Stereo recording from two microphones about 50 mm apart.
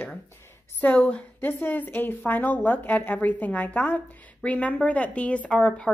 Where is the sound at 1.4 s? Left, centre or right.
Left.